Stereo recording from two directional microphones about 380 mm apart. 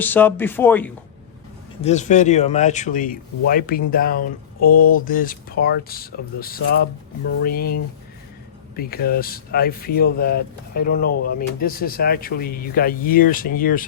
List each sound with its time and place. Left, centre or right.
0.0 s speech: centre
1.8 s speech: centre